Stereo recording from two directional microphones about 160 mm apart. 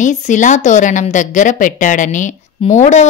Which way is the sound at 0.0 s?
50° left (ahead or behind).